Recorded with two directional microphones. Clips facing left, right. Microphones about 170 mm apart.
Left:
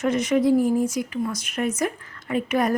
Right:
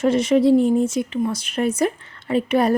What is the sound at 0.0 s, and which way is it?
A woman's voice, 30° right (ahead or behind).